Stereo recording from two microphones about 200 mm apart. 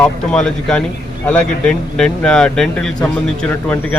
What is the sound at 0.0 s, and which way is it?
A man's voice, 5° left (ahead or behind).